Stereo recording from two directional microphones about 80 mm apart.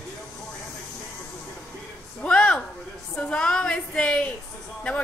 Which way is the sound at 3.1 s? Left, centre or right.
Centre.